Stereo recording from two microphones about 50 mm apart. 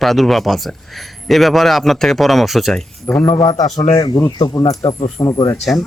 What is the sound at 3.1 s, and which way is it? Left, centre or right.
Speech, left.